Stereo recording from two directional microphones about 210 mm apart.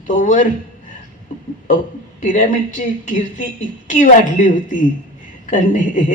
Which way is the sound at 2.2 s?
35° left (ahead or behind).